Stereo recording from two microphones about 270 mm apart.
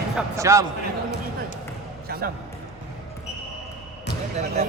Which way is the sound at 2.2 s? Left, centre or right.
Right.